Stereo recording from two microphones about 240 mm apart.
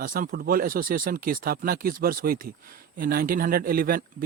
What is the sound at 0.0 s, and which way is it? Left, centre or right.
Speech, right.